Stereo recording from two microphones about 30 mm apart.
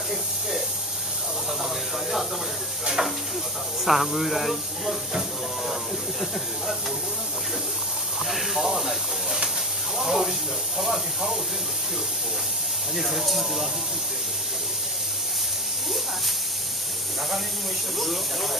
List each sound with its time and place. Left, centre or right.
1.6 s a sound: centre
3.0 s sizzle: centre
3.8 s speech: centre
8.3 s speech: centre
12.9 s speech: centre
17.9 s speech: centre